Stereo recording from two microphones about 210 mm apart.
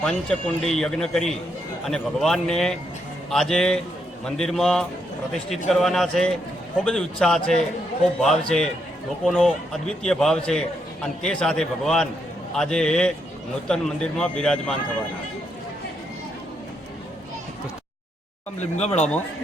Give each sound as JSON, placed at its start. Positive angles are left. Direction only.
{"t": 0.0, "sound": "a man's voice", "side_deg": 0}
{"t": 18.6, "sound": "speech", "side_deg": 35}
{"t": 18.9, "sound": "a man's voice", "side_deg": 5}